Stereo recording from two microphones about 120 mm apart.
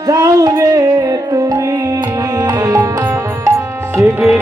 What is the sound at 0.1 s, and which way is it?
Music, 30° right (ahead or behind).